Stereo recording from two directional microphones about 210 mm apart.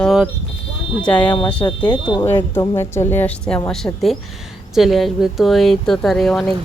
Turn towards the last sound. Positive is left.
turn(degrees=0)  # may be behind; listen again after turning